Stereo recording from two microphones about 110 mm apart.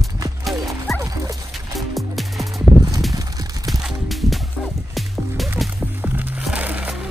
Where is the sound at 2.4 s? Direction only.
30° right (ahead or behind).